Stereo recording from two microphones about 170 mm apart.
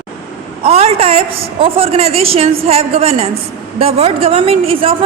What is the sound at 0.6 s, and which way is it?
A woman's voice, 35° right (ahead or behind).